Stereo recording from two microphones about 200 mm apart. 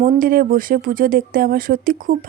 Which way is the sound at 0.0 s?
45° right (ahead or behind).